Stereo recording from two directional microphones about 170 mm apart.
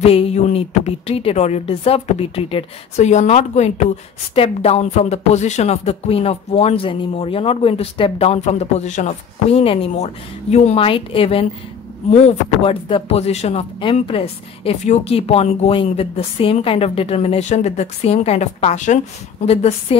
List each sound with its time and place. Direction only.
0.1 s speech: 35° left (ahead or behind)